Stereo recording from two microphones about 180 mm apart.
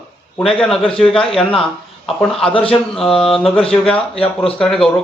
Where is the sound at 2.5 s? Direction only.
30° left (ahead or behind).